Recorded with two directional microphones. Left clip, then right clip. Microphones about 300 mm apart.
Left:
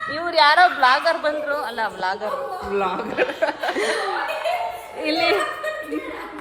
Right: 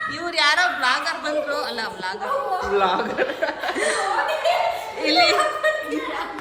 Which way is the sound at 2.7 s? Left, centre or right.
Left.